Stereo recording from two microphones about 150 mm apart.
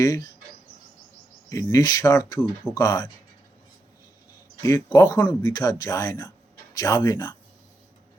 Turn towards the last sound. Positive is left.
turn(degrees=20)  # may be behind; listen again after turning